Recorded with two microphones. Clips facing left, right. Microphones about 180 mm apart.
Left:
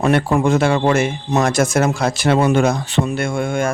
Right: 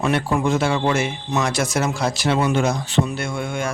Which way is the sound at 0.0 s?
50° left (ahead or behind).